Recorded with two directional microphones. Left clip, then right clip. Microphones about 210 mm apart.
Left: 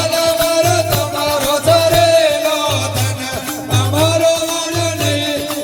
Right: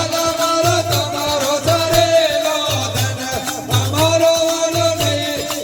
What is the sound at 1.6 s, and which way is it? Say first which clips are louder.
Music: left 5 dB; 45° left (ahead or behind).